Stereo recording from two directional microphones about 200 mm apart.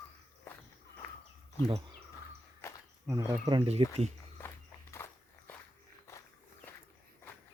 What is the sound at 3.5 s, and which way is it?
Speech, 30° right (ahead or behind).